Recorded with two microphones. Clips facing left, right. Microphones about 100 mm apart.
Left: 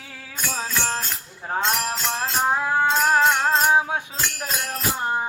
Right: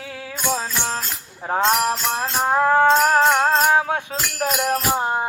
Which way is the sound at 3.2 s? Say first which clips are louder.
Right 3 dB; 40° right (ahead or behind).